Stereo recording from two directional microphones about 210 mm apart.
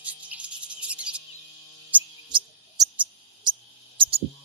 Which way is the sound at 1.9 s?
5° right (ahead or behind).